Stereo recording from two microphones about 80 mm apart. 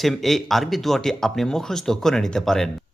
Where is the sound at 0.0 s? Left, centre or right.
Centre.